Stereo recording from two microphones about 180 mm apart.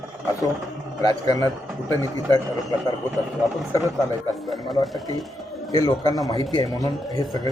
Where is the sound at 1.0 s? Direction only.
20° left (ahead or behind).